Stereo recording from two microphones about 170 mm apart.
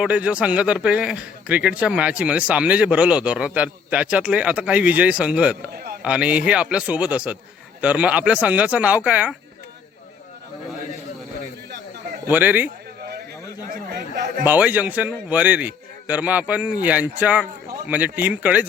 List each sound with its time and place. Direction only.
0.0 s a man's voice: 5° right (ahead or behind)
5.7 s a sound: 65° right (ahead or behind)
6.0 s a man's voice: 5° right (ahead or behind)
12.3 s a man's voice: 10° right (ahead or behind)
13.0 s a sound: 70° right (ahead or behind)
13.7 s speech: 55° right (ahead or behind)
14.4 s a man's voice: 10° right (ahead or behind)